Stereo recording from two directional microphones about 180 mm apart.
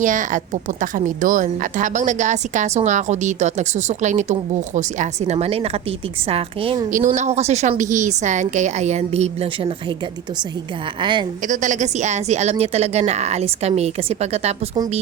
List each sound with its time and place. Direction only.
0.0 s a woman's voice: 45° right (ahead or behind); by 6.8 s 30° right (ahead or behind)
6.9 s a woman's voice: 45° right (ahead or behind)
11.0 s speech: 25° right (ahead or behind)
11.4 s a woman's voice: 45° right (ahead or behind)